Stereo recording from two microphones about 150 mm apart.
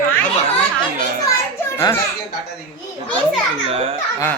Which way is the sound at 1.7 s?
15° left (ahead or behind).